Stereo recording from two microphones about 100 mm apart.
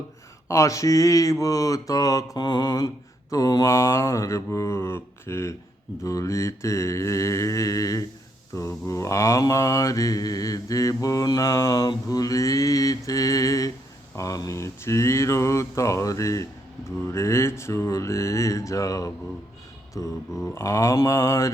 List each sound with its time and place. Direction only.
0.4 s mantra: 30° left (ahead or behind)
17.0 s speech: 30° left (ahead or behind)
19.9 s mantra: 35° left (ahead or behind)
20.5 s speech: 30° left (ahead or behind)